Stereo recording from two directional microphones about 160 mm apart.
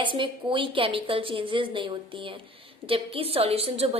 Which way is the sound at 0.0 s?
30° right (ahead or behind).